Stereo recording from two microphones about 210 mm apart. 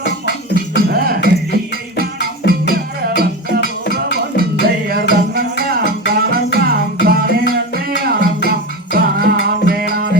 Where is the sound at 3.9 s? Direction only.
45° right (ahead or behind).